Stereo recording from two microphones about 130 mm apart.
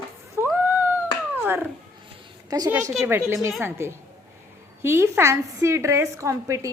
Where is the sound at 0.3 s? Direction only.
15° right (ahead or behind).